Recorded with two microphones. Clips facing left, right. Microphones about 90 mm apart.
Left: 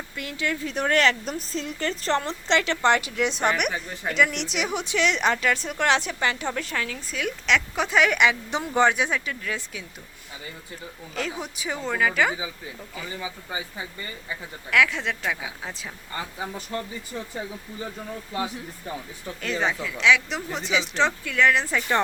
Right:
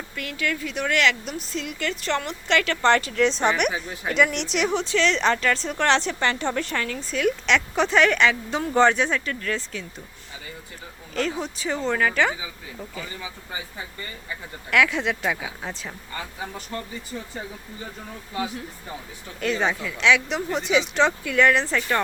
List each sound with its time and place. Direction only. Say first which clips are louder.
0.2 s speech: right 1 dB; 25° left (ahead or behind)
0.7 s speech: left 2 dB; 35° left (ahead or behind); by 9.8 s 10° left (ahead or behind)
11.1 s speech: right 5 dB; 5° left (ahead or behind)
14.7 s speech: right 1 dB; centre (ahead or behind)
19.4 s speech: right 3 dB; centre (ahead or behind)